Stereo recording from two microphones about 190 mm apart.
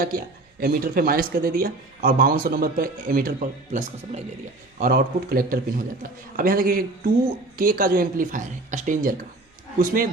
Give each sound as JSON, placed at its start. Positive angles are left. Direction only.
{"t": 0.0, "sound": "speech", "side_deg": -50}